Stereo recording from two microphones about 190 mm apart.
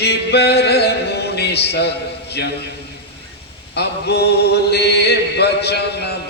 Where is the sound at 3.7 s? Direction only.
60° left (ahead or behind).